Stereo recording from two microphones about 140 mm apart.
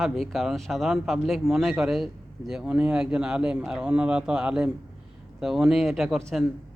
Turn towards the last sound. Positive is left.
turn(degrees=0)  # may be behind; listen again after turning